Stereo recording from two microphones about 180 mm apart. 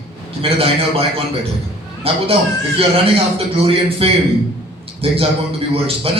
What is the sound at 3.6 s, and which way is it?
A man's voice, 30° right (ahead or behind).